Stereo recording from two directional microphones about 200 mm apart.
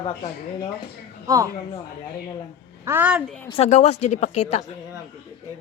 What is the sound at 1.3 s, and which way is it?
Speech, 15° right (ahead or behind).